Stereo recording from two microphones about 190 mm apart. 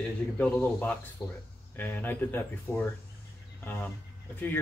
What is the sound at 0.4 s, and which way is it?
Speech, 10° left (ahead or behind).